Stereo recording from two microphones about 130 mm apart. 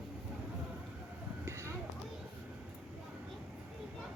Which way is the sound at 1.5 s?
20° right (ahead or behind).